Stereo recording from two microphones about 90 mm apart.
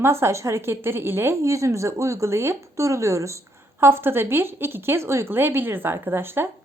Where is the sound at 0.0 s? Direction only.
30° right (ahead or behind).